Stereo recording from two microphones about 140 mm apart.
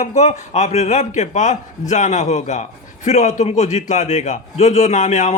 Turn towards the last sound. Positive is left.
turn(degrees=60)  # may be behind; listen again after turning